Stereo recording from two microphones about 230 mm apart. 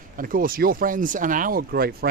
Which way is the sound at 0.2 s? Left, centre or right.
Right.